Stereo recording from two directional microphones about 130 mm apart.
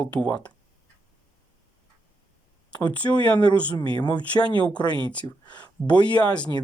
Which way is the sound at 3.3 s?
10° left (ahead or behind).